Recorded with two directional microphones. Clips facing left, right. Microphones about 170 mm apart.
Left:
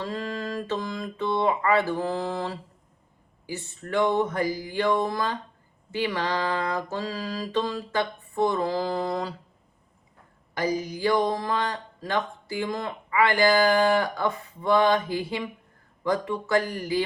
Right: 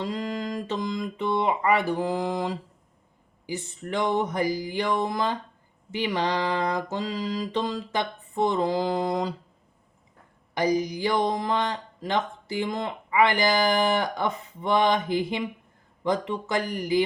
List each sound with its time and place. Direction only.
0.0 s speech: 15° right (ahead or behind)
10.5 s speech: 15° right (ahead or behind)